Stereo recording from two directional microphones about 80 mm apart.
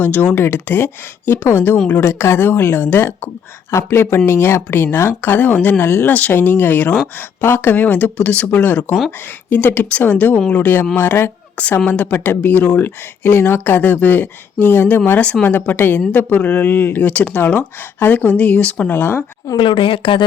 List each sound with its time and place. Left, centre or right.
0.0 s speech: left
5.8 s speech: left
19.5 s a woman's voice: left